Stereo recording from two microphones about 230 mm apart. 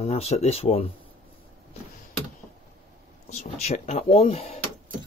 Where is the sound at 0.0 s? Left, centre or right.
Left.